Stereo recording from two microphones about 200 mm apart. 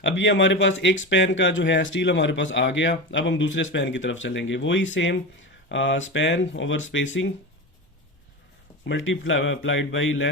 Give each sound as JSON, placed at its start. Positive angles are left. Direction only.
{"t": 0.0, "sound": "speech", "side_deg": 65}
{"t": 8.9, "sound": "speech", "side_deg": 70}